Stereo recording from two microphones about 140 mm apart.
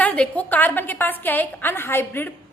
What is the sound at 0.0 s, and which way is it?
A woman's voice, 10° left (ahead or behind).